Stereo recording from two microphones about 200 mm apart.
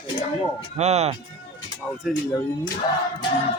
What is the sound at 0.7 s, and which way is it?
Speech, 35° right (ahead or behind).